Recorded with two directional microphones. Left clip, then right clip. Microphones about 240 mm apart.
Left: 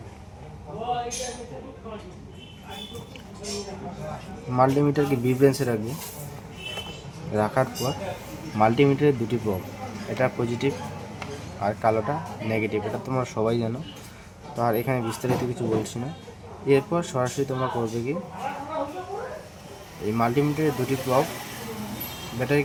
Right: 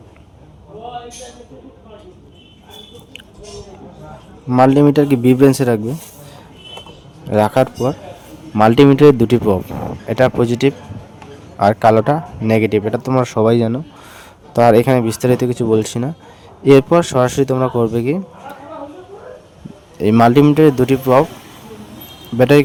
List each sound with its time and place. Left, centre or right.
4.5 s speech: right
7.3 s speech: right
20.1 s speech: right
22.4 s speech: right